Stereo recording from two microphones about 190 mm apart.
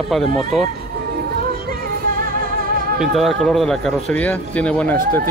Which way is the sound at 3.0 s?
Centre (ahead or behind).